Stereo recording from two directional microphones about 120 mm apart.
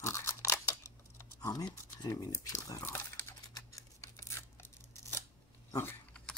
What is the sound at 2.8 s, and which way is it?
Tearing, 20° left (ahead or behind).